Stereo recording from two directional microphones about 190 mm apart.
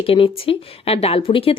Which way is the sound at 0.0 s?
30° left (ahead or behind).